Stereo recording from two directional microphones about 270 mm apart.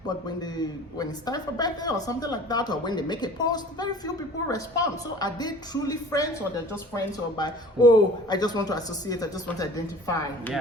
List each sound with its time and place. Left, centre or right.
0.3 s speech: centre